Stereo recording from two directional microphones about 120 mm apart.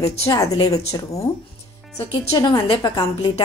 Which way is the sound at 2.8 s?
35° left (ahead or behind).